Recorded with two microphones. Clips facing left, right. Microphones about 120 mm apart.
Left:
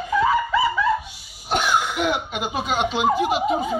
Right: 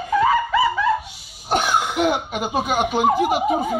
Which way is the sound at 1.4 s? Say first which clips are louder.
Right 1 dB; 50° right (ahead or behind).